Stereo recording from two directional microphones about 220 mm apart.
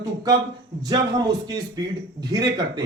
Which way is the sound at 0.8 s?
20° right (ahead or behind).